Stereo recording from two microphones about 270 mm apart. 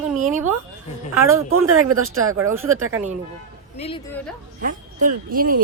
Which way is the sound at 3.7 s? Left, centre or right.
Left.